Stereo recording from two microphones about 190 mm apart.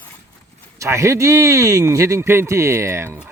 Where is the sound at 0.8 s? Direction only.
15° right (ahead or behind).